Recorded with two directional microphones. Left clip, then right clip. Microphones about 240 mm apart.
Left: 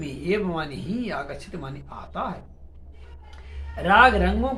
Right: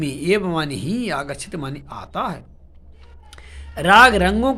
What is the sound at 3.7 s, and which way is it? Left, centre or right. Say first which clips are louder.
Speech: right 5 dB; right.